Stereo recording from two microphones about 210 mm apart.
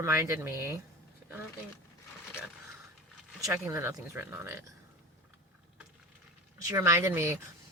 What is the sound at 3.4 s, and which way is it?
Speech, 15° right (ahead or behind).